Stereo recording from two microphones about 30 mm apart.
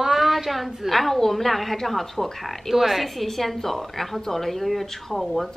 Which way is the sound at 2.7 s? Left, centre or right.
Centre.